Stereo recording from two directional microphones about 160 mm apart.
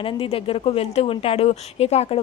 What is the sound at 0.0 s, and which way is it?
Speech, 35° left (ahead or behind).